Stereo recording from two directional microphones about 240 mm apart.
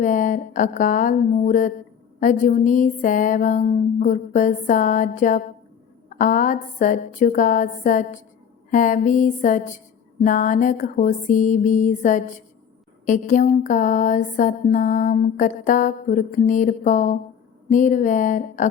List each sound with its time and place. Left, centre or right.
0.0 s music: left